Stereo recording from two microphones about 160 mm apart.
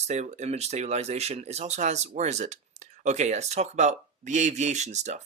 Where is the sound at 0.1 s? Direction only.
45° right (ahead or behind).